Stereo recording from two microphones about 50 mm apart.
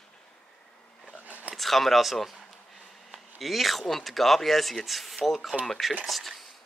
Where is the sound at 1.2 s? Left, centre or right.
Right.